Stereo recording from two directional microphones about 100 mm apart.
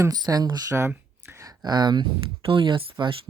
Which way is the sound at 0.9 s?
25° right (ahead or behind).